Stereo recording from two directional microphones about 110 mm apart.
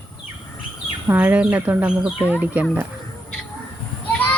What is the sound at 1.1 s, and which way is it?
Speech, 15° right (ahead or behind).